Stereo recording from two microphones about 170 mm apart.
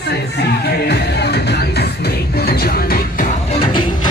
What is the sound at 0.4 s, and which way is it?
Music, 70° left (ahead or behind).